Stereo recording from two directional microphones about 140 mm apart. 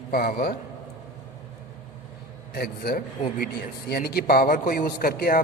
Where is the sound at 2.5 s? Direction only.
90° left.